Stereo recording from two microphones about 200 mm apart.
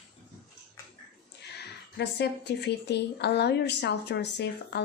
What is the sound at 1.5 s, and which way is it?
Speech, 55° left (ahead or behind).